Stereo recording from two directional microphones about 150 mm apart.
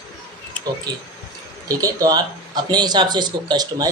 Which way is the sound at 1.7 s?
25° right (ahead or behind).